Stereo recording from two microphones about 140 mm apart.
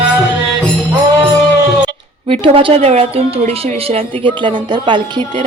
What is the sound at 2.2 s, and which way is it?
Speech, 40° right (ahead or behind).